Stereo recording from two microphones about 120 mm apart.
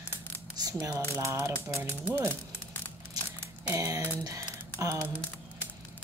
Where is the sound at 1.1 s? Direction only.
20° right (ahead or behind).